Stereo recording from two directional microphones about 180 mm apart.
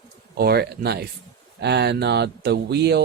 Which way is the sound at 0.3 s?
60° right (ahead or behind).